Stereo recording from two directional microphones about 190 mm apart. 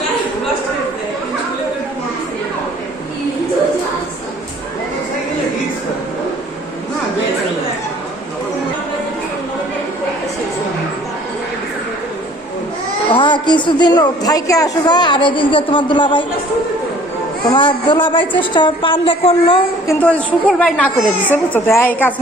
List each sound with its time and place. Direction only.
13.1 s a woman's voice: 25° left (ahead or behind)
17.5 s a woman's voice: 25° left (ahead or behind)
19.9 s a woman's voice: 10° left (ahead or behind)